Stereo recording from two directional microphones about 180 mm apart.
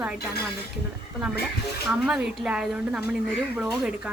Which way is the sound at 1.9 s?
5° right (ahead or behind).